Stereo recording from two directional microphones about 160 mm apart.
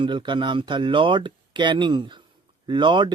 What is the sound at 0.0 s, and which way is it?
Speech, 30° right (ahead or behind).